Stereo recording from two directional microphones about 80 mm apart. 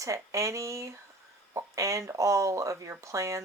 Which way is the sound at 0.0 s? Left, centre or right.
Right.